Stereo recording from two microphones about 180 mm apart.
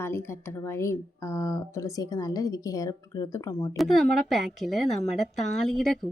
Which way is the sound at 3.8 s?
Centre (ahead or behind).